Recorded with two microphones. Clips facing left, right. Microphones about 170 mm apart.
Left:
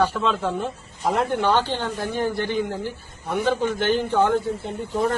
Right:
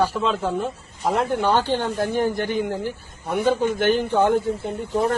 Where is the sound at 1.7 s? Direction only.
45° right (ahead or behind).